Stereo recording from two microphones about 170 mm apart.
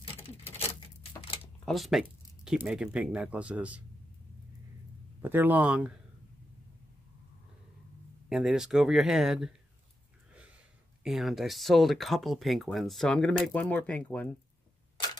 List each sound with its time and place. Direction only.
1.2 s a sound: 35° left (ahead or behind)
1.7 s speech: centre (ahead or behind)
5.2 s speech: 10° right (ahead or behind)
8.3 s speech: centre (ahead or behind)
11.1 s speech: centre (ahead or behind)